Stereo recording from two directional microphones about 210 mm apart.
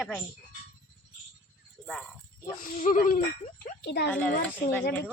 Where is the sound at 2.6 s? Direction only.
35° left (ahead or behind).